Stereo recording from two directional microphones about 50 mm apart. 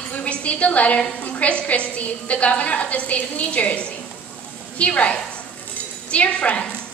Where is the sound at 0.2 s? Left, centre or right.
Left.